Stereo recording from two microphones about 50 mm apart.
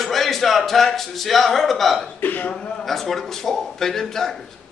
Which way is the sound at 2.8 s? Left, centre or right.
Centre.